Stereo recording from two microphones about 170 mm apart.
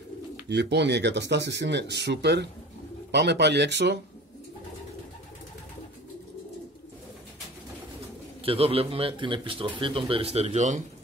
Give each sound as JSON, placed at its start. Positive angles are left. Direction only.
{"t": 0.5, "sound": "speech", "side_deg": -80}
{"t": 8.5, "sound": "speech", "side_deg": -35}